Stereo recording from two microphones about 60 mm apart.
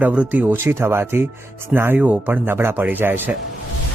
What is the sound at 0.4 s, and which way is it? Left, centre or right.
Speech, right.